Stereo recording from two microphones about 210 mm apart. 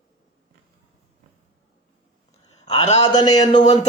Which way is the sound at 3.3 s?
35° left (ahead or behind).